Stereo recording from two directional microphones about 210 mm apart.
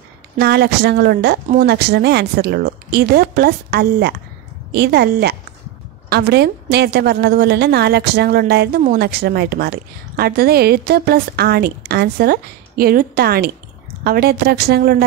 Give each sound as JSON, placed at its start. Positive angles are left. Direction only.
{"t": 0.4, "sound": "a woman's voice", "side_deg": -50}